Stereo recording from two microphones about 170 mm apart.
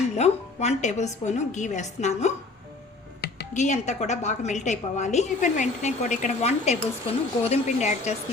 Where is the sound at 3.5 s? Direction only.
45° left (ahead or behind).